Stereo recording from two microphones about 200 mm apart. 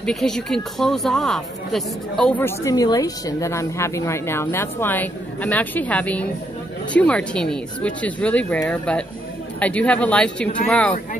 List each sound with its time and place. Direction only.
0.0 s speech: centre (ahead or behind)